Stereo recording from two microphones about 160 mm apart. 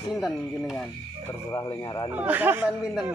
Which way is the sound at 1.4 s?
20° left (ahead or behind).